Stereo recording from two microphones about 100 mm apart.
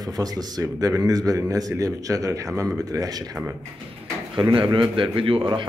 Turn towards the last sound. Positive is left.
turn(degrees=-60)  # may be behind; listen again after turning